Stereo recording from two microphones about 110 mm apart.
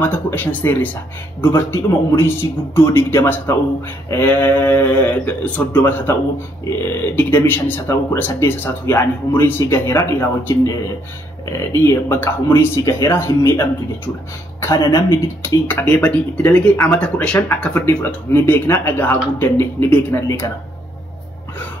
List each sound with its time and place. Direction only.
0.0 s speech: 20° left (ahead or behind)
7.2 s speech: 20° left (ahead or behind)